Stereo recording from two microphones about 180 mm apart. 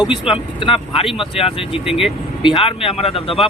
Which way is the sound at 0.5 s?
30° left (ahead or behind).